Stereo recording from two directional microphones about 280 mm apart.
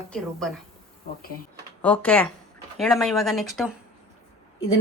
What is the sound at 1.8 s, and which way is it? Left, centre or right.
A woman's voice, centre.